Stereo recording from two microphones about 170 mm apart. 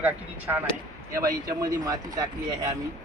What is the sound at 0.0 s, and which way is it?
Speech, 10° right (ahead or behind).